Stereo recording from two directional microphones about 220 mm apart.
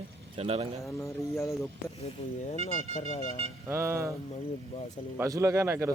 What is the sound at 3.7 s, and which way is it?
Speech, 10° right (ahead or behind).